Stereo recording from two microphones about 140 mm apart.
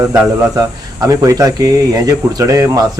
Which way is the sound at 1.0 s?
25° right (ahead or behind).